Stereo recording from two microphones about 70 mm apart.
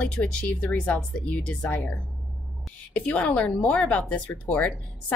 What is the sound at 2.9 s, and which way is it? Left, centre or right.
A woman's voice, centre.